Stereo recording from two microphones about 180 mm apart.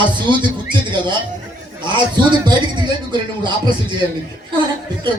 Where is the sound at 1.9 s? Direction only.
25° right (ahead or behind).